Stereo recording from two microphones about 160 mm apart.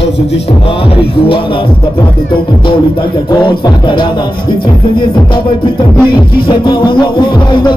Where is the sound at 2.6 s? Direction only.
30° left (ahead or behind).